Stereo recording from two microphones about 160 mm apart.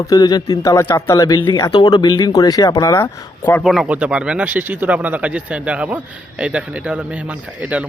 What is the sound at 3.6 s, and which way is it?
Speech, centre (ahead or behind).